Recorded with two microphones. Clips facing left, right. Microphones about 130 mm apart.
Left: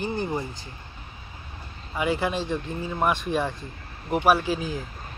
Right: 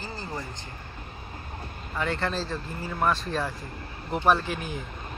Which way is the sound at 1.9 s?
10° left (ahead or behind).